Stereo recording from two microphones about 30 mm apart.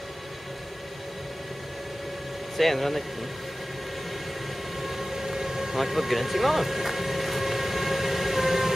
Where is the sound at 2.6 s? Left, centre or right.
Centre.